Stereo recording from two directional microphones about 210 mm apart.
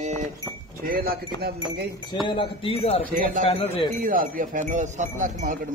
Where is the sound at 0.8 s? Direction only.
45° right (ahead or behind).